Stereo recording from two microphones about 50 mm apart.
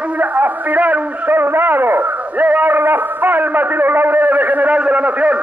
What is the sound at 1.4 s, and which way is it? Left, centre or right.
A man's voice, right.